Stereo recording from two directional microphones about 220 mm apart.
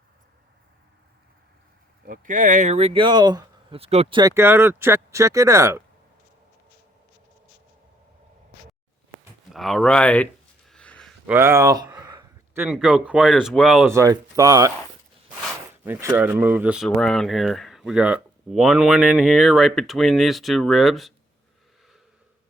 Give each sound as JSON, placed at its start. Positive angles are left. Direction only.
{"t": 2.0, "sound": "speech", "side_deg": -35}
{"t": 4.2, "sound": "speech", "side_deg": -15}
{"t": 9.5, "sound": "speech", "side_deg": 0}
{"t": 10.7, "sound": "a sound", "side_deg": 5}
{"t": 11.3, "sound": "a sound", "side_deg": -10}
{"t": 12.6, "sound": "speech", "side_deg": 0}
{"t": 13.9, "sound": "speech", "side_deg": -15}
{"t": 15.8, "sound": "speech", "side_deg": -10}